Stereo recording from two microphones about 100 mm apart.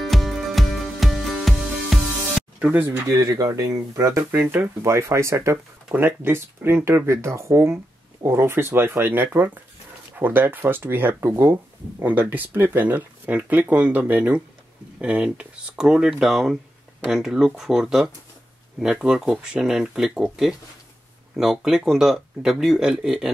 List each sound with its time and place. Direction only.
0.0 s music: centre (ahead or behind)
2.6 s speech: 20° right (ahead or behind)
3.2 s speech: 45° right (ahead or behind)
3.4 s speech: 30° right (ahead or behind); by 23.3 s 5° right (ahead or behind)